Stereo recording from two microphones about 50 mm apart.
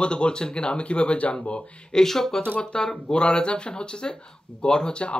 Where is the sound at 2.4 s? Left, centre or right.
Left.